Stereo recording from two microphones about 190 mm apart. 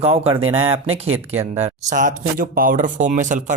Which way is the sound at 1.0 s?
90° right.